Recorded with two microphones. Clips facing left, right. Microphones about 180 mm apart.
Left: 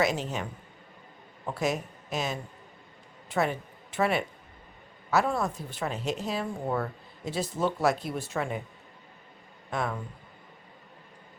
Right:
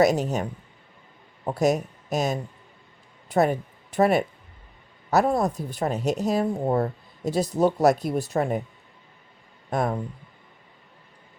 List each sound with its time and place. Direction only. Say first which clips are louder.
0.0 s speech: right 7 dB; 40° right (ahead or behind)
1.5 s speech: right 7 dB; 40° right (ahead or behind)
9.6 s speech: right 6 dB; 40° right (ahead or behind)